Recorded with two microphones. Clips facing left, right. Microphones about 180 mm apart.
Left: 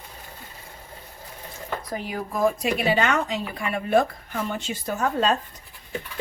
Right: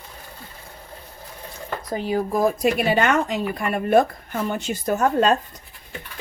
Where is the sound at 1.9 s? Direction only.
30° right (ahead or behind).